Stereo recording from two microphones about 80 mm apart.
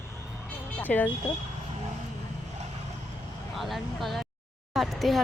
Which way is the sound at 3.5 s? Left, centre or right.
Centre.